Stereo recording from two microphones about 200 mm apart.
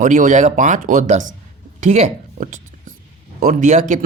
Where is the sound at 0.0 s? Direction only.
40° right (ahead or behind).